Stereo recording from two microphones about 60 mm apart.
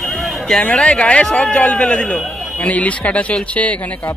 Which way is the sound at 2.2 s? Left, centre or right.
Centre.